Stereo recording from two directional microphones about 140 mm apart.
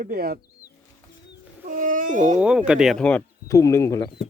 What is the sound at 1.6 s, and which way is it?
Babbling, 75° right (ahead or behind).